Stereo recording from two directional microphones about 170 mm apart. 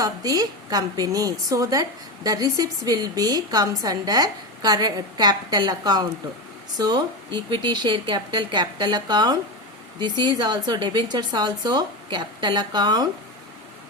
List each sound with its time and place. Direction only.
0.0 s a woman's voice: 20° right (ahead or behind)